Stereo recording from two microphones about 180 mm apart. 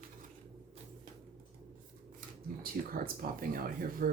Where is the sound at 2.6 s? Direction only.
55° right (ahead or behind).